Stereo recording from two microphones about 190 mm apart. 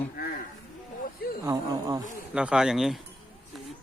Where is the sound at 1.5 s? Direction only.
20° right (ahead or behind).